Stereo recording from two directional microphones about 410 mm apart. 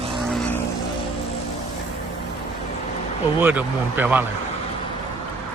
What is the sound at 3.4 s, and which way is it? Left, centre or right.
Speech, centre.